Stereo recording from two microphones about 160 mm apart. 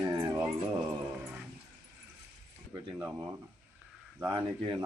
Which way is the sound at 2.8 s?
15° right (ahead or behind).